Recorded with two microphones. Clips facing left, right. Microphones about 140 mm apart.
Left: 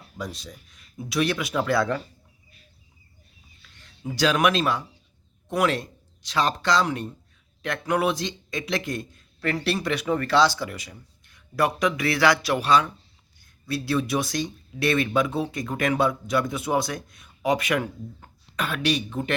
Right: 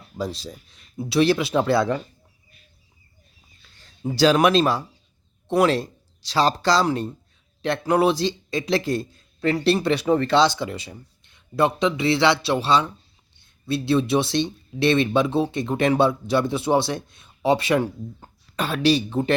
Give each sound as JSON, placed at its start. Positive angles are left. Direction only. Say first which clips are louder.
{"t": 0.2, "sound": "a man's voice", "louder": "right 6 dB", "side_deg": -30}
{"t": 3.6, "sound": "a man's voice", "louder": "right 7 dB", "side_deg": -30}